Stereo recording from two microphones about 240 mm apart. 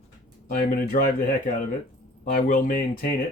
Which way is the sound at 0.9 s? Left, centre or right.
Left.